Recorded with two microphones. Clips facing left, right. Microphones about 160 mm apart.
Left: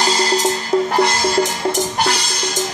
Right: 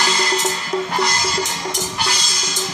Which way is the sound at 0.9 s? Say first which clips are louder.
Left 6 dB; 55° left (ahead or behind).